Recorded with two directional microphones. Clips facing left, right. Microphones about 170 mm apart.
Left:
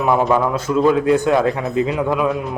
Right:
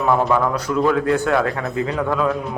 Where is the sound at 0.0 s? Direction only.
15° left (ahead or behind).